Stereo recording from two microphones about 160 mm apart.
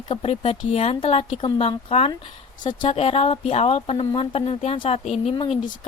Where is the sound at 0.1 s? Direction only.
35° left (ahead or behind).